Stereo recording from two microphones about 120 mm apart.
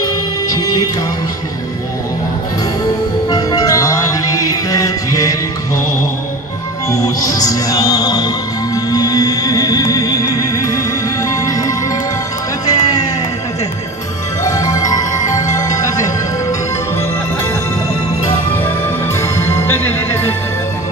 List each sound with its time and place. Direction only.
0.0 s music: 30° left (ahead or behind)
3.3 s music: 30° left (ahead or behind)
6.9 s music: 30° left (ahead or behind)
14.4 s music: 30° left (ahead or behind)
19.3 s music: 20° left (ahead or behind)